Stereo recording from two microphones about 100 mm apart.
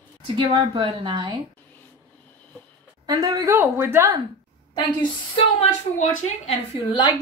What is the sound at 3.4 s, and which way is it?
Speech, 25° right (ahead or behind).